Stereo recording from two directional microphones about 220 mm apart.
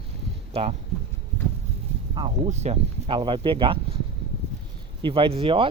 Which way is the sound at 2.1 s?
25° right (ahead or behind).